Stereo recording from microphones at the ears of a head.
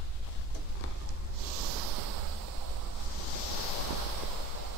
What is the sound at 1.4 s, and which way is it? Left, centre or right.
Snort, right.